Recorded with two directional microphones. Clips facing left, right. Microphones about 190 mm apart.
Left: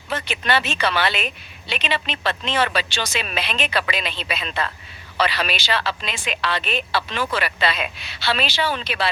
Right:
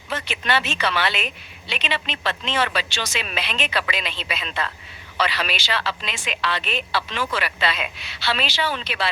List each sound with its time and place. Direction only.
0.1 s a woman's voice: 35° left (ahead or behind)